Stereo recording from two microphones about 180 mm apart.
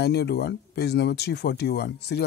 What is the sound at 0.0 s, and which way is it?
Speech, 65° left (ahead or behind).